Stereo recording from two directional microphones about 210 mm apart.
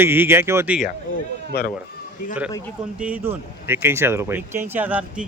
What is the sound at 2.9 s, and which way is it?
Speech, 5° right (ahead or behind).